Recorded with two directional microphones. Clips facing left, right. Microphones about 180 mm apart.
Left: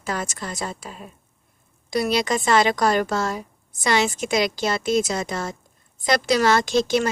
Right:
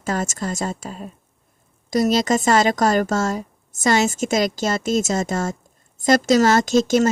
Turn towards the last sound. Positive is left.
turn(degrees=-45)  # may be behind; listen again after turning